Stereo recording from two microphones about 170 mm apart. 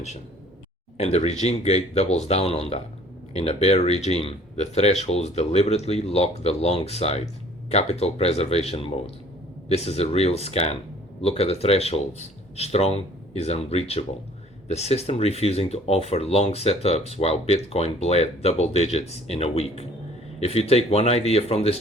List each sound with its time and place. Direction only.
0.9 s speech: 40° left (ahead or behind)